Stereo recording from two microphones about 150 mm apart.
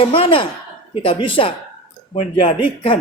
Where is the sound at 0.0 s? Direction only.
35° left (ahead or behind).